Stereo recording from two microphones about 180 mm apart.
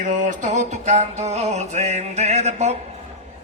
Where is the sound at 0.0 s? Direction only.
45° right (ahead or behind).